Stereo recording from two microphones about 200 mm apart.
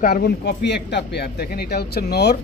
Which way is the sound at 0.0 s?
50° left (ahead or behind).